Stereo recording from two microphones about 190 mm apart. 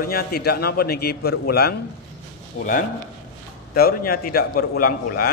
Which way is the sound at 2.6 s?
40° left (ahead or behind).